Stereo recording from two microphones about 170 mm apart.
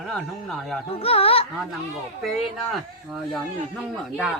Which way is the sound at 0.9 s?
35° left (ahead or behind).